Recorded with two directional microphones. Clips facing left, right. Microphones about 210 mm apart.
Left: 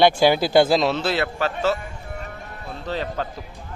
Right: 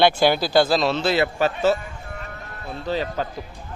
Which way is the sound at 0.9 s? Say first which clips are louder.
Right 2 dB; 5° left (ahead or behind).